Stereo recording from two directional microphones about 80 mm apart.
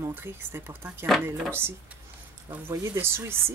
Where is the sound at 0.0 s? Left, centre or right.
Right.